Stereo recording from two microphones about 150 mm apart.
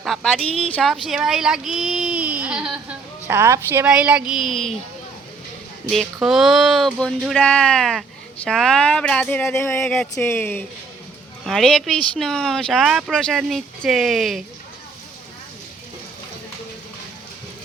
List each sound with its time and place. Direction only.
0.0 s speech: centre (ahead or behind)
3.2 s a woman's voice: 15° right (ahead or behind)
3.8 s speech: 5° right (ahead or behind)
6.1 s speech: centre (ahead or behind); by 10.7 s 15° left (ahead or behind)
11.4 s speech: centre (ahead or behind)